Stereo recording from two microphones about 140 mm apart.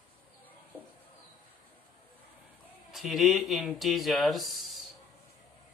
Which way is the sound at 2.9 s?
Centre (ahead or behind).